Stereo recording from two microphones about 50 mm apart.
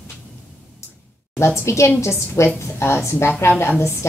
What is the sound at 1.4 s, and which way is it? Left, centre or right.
A woman's voice, left.